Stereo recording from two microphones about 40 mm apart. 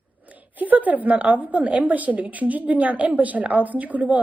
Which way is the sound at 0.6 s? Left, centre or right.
Right.